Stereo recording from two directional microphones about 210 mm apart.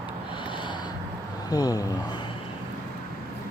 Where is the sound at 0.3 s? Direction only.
25° left (ahead or behind).